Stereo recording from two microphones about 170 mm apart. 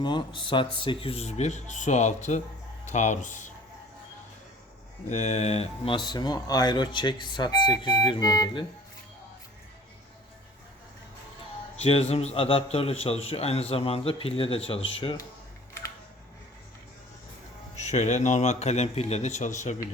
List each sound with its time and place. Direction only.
0.0 s a man's voice: 30° left (ahead or behind); by 3.5 s 45° left (ahead or behind)
5.0 s speech: 40° left (ahead or behind); by 8.6 s 20° left (ahead or behind)
11.8 s a man's voice: 35° left (ahead or behind)
17.7 s speech: 45° left (ahead or behind)